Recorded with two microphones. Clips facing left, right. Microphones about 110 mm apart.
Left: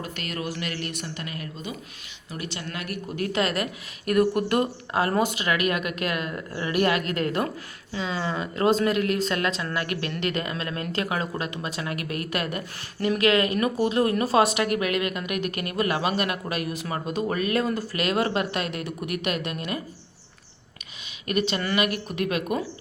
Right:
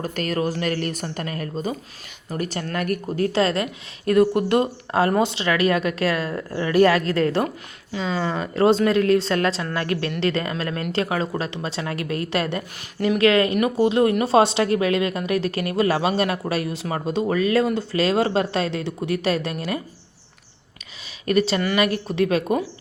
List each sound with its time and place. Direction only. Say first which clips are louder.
0.0 s speech: right 8 dB; 40° right (ahead or behind)
3.2 s speech: right 4 dB; 30° right (ahead or behind)
21.2 s speech: right 6 dB; 35° right (ahead or behind)